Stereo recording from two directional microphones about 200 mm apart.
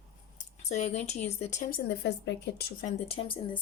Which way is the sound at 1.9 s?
60° left (ahead or behind).